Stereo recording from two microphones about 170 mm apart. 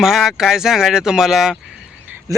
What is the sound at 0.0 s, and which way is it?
Speech, centre (ahead or behind).